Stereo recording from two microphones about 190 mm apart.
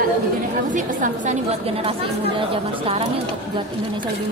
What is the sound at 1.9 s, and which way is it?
A woman's voice, 30° right (ahead or behind).